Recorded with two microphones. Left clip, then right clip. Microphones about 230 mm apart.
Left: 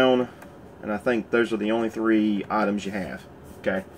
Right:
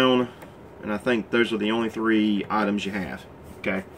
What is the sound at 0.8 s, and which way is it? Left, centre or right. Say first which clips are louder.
Speech: even; centre.